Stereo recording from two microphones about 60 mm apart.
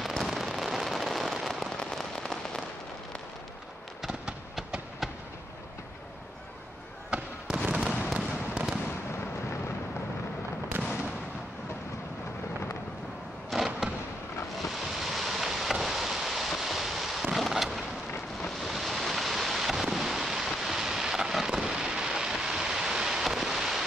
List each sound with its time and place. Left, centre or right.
0.0 s fireworks: centre
4.6 s a sound: centre
7.1 s fireworks: centre
10.8 s fireworks: right
13.7 s fireworks: centre
14.6 s a sound: centre
18.6 s fireworks: centre